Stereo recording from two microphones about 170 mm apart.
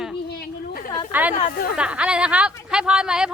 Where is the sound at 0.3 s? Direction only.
60° left (ahead or behind).